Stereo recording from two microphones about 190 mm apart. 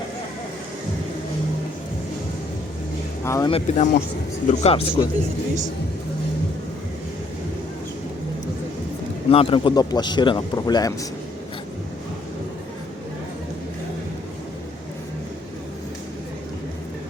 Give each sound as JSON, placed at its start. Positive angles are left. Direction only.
{"t": 3.2, "sound": "speech", "side_deg": 15}
{"t": 3.5, "sound": "speech", "side_deg": 40}
{"t": 9.3, "sound": "speech", "side_deg": 30}